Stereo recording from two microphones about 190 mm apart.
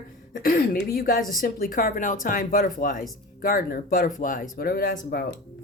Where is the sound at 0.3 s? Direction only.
50° left (ahead or behind).